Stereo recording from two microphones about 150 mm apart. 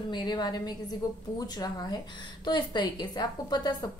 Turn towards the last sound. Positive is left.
turn(degrees=25)  # may be behind; listen again after turning